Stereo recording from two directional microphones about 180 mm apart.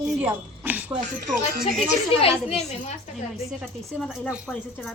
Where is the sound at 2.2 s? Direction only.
30° left (ahead or behind).